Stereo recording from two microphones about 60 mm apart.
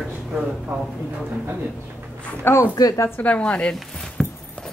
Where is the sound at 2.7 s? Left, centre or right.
Left.